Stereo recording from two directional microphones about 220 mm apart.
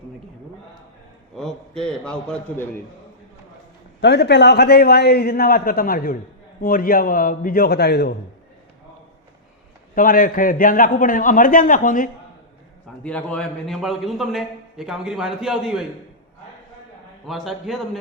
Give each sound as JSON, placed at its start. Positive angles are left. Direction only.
{"t": 1.4, "sound": "a man's voice", "side_deg": 0}
{"t": 4.0, "sound": "a man's voice", "side_deg": 50}
{"t": 9.9, "sound": "a man's voice", "side_deg": 40}
{"t": 13.0, "sound": "a man's voice", "side_deg": 5}
{"t": 17.2, "sound": "a man's voice", "side_deg": 0}